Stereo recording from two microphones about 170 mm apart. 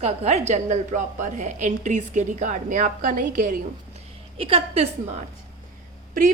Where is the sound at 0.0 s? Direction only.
40° right (ahead or behind).